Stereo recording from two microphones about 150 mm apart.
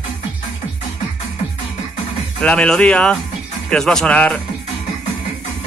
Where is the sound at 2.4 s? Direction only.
5° left (ahead or behind).